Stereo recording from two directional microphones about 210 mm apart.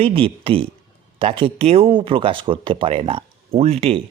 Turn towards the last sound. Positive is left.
turn(degrees=-30)  # may be behind; listen again after turning